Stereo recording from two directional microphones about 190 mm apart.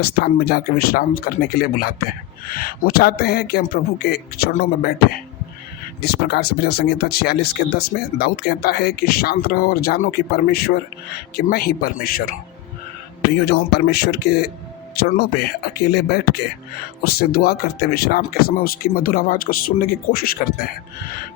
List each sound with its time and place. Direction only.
0.0 s speech: 55° left (ahead or behind)
6.0 s speech: 60° left (ahead or behind)
13.4 s speech: 60° left (ahead or behind)